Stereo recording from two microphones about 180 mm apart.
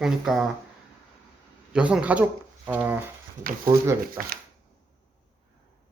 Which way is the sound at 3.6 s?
20° right (ahead or behind).